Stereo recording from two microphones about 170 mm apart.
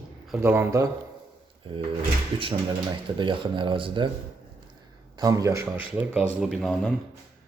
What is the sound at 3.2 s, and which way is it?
Speech, 30° right (ahead or behind).